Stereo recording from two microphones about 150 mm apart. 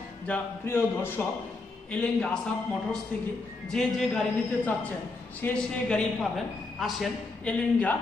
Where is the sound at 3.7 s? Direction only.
5° left (ahead or behind).